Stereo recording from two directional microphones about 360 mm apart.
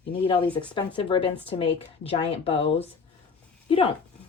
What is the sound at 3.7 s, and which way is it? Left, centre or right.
Speech, centre.